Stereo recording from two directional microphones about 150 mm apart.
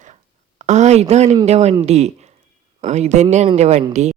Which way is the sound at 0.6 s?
50° right (ahead or behind).